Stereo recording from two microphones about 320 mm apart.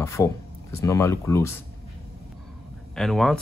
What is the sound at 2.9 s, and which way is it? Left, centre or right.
Speech, centre.